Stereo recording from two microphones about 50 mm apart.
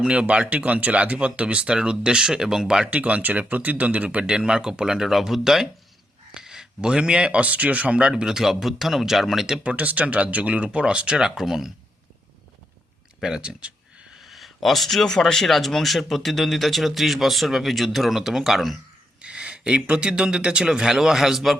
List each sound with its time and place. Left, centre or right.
0.0 s speech: centre
2.8 s speech: right
4.3 s speech: centre
9.6 s speech: right; by 11.7 s centre
13.2 s speech: centre
13.6 s a sound: right
14.2 s speech: centre
19.2 s speech: right; by 21.6 s centre